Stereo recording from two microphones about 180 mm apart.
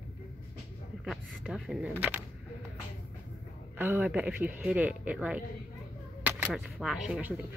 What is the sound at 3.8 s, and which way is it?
Speech, 10° right (ahead or behind).